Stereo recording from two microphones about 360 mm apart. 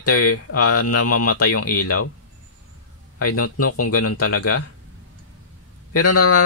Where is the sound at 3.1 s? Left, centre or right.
Left.